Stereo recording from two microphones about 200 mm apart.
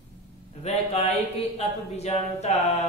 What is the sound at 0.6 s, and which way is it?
Speech, 30° left (ahead or behind).